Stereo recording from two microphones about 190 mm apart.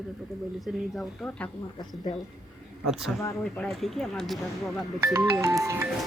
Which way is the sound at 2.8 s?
Centre (ahead or behind).